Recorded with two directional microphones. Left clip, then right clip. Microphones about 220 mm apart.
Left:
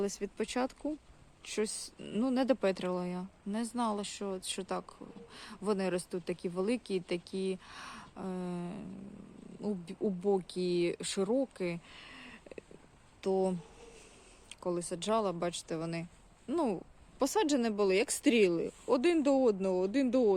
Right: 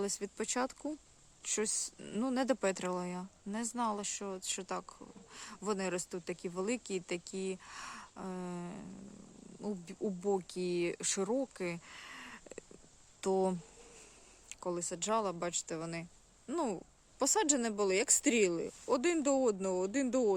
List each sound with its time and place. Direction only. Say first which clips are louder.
0.0 s speech: left 3 dB; 10° right (ahead or behind)
14.5 s speech: left 3 dB; 5° right (ahead or behind)